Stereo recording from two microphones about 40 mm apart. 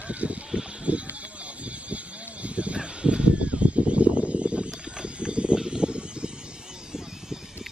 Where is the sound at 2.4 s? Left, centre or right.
Right.